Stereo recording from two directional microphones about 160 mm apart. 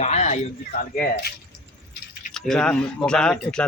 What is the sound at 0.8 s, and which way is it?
Speech, 70° left (ahead or behind).